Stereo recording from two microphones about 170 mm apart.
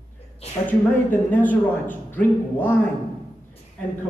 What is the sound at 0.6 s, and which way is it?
A man's voice, 10° left (ahead or behind).